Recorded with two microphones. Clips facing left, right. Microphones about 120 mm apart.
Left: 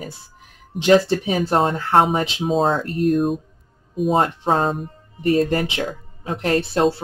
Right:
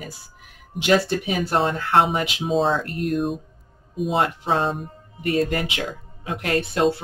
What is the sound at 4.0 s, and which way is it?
Speech, 40° left (ahead or behind).